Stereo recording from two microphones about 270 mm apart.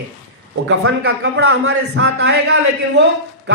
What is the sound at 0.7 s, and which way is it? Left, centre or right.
A man's voice, right.